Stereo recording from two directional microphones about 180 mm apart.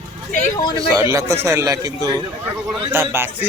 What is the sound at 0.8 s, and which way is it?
A man's voice, 15° right (ahead or behind).